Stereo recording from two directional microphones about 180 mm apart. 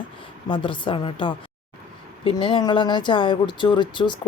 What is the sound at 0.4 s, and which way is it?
Speech, 30° left (ahead or behind).